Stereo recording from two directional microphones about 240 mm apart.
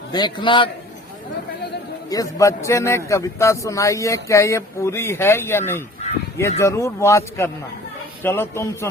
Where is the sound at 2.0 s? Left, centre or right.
Centre.